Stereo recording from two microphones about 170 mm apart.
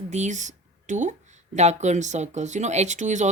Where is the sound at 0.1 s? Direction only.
45° right (ahead or behind).